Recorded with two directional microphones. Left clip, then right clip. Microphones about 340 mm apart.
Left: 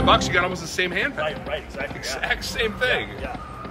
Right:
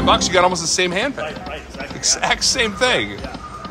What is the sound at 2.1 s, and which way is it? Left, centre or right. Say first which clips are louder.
Speech: right 8 dB; centre.